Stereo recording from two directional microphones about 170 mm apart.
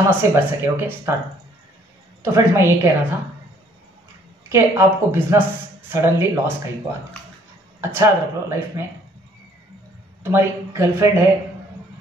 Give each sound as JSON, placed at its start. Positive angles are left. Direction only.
{"t": 0.2, "sound": "speech", "side_deg": -15}
{"t": 2.2, "sound": "speech", "side_deg": -15}
{"t": 4.5, "sound": "speech", "side_deg": -15}
{"t": 7.8, "sound": "speech", "side_deg": -15}
{"t": 10.2, "sound": "speech", "side_deg": -15}